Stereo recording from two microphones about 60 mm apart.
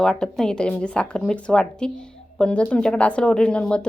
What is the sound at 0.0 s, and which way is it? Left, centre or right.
A woman's voice, centre.